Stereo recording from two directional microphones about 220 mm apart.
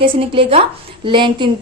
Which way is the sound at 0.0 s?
25° right (ahead or behind).